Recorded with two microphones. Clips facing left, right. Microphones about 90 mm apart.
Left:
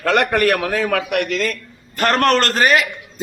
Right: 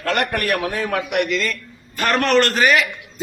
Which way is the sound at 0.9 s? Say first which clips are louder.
Left 1 dB; 60° left (ahead or behind).